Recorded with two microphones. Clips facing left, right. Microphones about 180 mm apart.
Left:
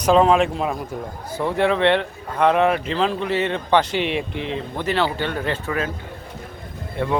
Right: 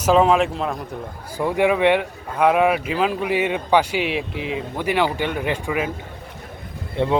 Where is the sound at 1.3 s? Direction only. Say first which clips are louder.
Right 1 dB; 10° right (ahead or behind).